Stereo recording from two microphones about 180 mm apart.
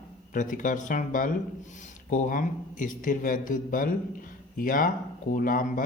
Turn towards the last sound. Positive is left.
turn(degrees=50)  # may be behind; listen again after turning